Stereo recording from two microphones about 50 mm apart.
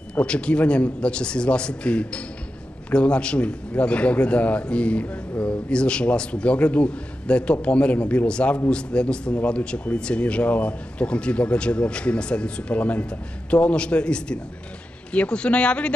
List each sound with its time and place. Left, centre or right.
0.2 s speech: left
9.4 s speech: left
9.9 s speech: left